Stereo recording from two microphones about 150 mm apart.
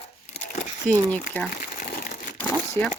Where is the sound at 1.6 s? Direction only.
65° left (ahead or behind).